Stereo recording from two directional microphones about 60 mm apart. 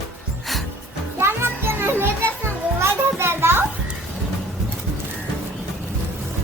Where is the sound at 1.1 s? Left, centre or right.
Right.